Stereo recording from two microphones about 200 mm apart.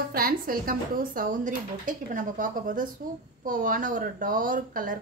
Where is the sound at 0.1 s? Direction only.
45° right (ahead or behind).